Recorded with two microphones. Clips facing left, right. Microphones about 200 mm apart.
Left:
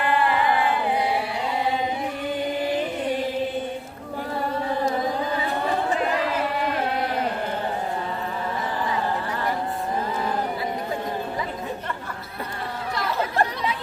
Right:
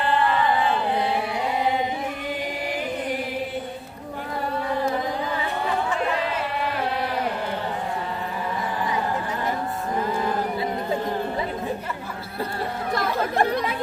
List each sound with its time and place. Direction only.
12.9 s chatter: 50° right (ahead or behind)